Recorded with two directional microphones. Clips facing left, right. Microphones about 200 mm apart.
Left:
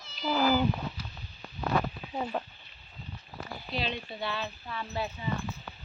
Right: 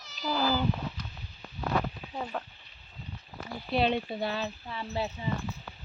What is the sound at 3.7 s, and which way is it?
Speech, 60° right (ahead or behind).